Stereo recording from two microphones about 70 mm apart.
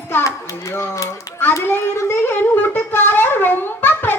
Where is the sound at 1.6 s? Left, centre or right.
Left.